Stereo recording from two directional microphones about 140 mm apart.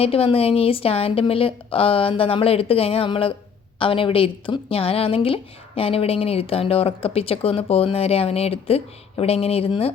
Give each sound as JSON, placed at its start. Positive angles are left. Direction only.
{"t": 0.0, "sound": "a woman's voice", "side_deg": 45}